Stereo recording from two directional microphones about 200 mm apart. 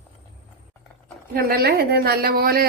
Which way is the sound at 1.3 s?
50° right (ahead or behind).